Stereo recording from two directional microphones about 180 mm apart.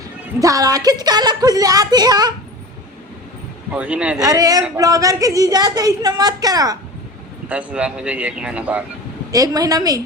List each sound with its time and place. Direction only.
0.3 s a woman's voice: 20° right (ahead or behind)
3.7 s speech: 10° right (ahead or behind)
4.2 s a woman's voice: 20° right (ahead or behind)
7.4 s speech: 5° right (ahead or behind)
9.3 s a woman's voice: 20° right (ahead or behind)